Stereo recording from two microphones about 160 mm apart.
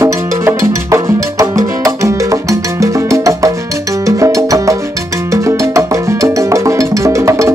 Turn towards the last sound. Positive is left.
turn(degrees=-20)  # may be behind; listen again after turning